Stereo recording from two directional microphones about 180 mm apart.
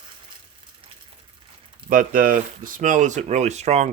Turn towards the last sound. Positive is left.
turn(degrees=-40)  # may be behind; listen again after turning